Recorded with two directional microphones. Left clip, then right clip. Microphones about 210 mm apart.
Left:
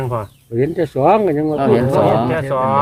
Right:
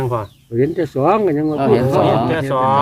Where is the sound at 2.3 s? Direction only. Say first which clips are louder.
Right 1 dB; 45° right (ahead or behind).